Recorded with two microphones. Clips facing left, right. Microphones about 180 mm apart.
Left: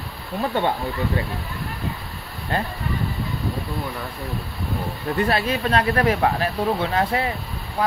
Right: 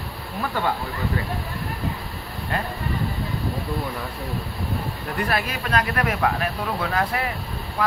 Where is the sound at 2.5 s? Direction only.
30° left (ahead or behind).